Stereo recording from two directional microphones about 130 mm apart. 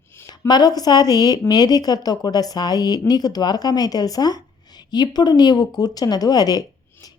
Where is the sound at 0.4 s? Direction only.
30° left (ahead or behind).